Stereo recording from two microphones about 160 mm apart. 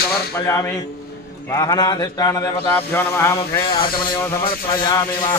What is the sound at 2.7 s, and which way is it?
Speech, 15° left (ahead or behind).